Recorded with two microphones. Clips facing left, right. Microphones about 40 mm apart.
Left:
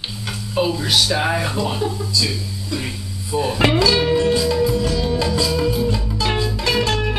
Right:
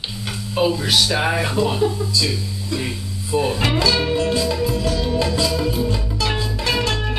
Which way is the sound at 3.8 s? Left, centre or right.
Left.